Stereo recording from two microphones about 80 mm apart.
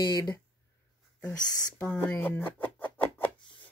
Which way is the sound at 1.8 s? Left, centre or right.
Centre.